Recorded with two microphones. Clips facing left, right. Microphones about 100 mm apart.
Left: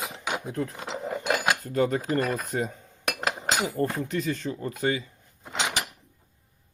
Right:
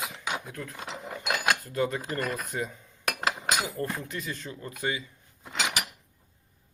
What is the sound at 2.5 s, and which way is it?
Speech, 40° left (ahead or behind).